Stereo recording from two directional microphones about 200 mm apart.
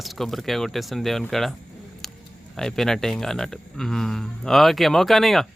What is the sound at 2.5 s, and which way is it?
Speech, 5° left (ahead or behind).